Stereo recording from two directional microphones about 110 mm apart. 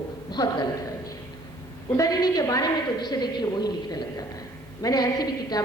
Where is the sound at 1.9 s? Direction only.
35° left (ahead or behind).